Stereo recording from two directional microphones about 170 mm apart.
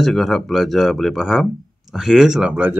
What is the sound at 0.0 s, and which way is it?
Speech, centre (ahead or behind).